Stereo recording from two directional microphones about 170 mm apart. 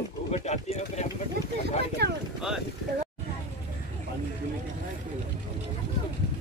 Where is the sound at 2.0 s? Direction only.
75° right (ahead or behind).